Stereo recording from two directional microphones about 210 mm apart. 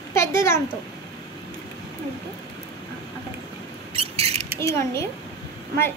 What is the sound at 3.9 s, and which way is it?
Rodents, 30° right (ahead or behind).